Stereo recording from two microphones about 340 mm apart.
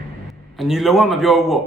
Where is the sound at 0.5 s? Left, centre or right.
Centre.